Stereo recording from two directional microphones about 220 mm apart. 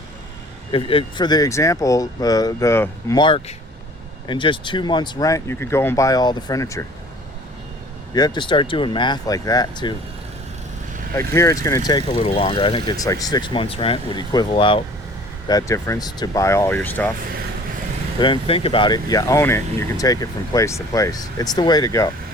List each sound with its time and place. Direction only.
0.7 s speech: 25° left (ahead or behind)
8.1 s speech: 20° left (ahead or behind)
11.1 s speech: 15° left (ahead or behind)
18.2 s speech: 25° left (ahead or behind)